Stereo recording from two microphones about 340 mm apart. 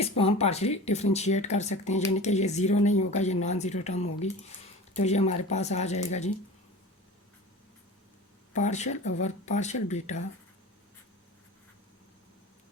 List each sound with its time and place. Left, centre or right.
0.0 s speech: centre
8.5 s speech: left